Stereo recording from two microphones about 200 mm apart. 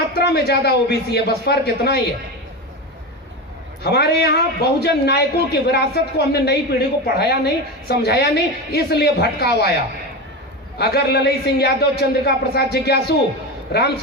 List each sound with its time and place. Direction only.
0.1 s a man's voice: 55° left (ahead or behind)
3.8 s a man's voice: 55° left (ahead or behind)
10.8 s a man's voice: 55° left (ahead or behind)